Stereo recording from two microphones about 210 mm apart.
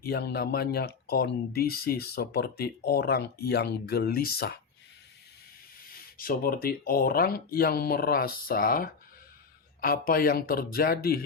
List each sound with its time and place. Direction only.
0.0 s speech: 50° left (ahead or behind)
5.9 s speech: 45° left (ahead or behind)